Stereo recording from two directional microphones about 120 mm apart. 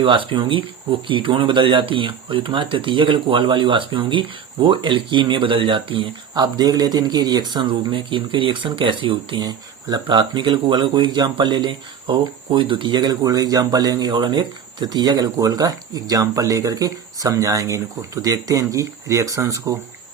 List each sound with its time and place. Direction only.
0.0 s speech: 45° right (ahead or behind); by 19.7 s 25° right (ahead or behind)